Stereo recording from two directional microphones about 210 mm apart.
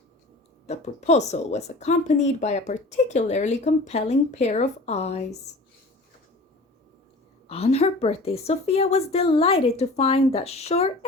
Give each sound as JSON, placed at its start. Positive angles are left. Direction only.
{"t": 0.7, "sound": "speech", "side_deg": 30}
{"t": 7.4, "sound": "a woman's voice", "side_deg": 30}